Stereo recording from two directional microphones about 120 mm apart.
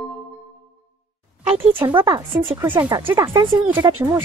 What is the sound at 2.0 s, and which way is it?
Speech, 35° right (ahead or behind).